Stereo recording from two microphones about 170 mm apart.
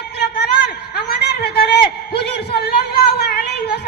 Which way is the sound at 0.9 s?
70° left (ahead or behind).